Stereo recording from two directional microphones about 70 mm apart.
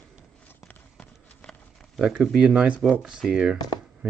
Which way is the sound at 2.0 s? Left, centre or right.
Centre.